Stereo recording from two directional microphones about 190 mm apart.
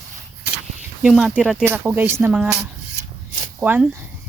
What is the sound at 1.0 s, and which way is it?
Speech, centre (ahead or behind).